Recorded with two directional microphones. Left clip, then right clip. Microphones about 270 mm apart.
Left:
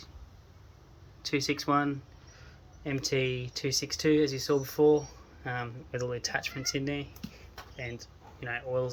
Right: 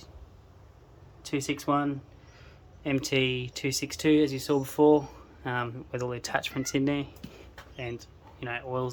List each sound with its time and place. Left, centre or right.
1.2 s speech: centre
1.5 s speech: centre
2.8 s speech: centre
4.2 s speech: centre